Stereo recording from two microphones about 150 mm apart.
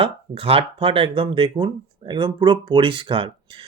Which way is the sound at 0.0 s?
40° right (ahead or behind).